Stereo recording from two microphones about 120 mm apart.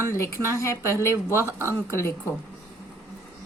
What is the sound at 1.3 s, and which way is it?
Speech, 20° right (ahead or behind).